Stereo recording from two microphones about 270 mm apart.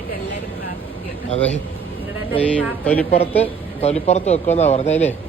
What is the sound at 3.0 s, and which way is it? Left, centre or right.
Speech, left.